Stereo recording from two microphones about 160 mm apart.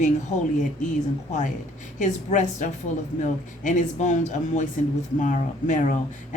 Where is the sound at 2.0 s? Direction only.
50° left (ahead or behind).